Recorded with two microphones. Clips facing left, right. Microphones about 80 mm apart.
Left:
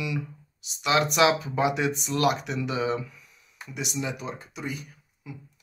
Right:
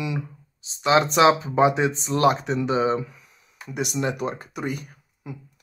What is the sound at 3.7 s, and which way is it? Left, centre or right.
Speech, right.